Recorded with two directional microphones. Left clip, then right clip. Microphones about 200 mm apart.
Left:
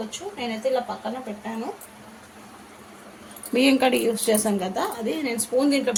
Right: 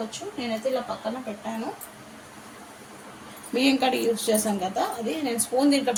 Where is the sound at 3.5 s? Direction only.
40° left (ahead or behind).